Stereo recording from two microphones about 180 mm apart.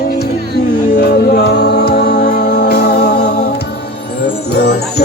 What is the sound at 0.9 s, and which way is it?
Music, 65° left (ahead or behind).